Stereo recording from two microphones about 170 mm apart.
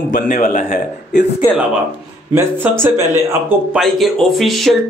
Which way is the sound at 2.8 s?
15° right (ahead or behind).